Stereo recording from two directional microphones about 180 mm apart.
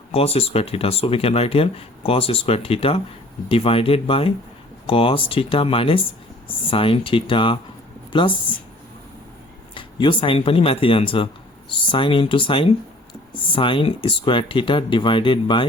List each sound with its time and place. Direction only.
0.1 s speech: 35° left (ahead or behind)
9.7 s speech: 25° left (ahead or behind)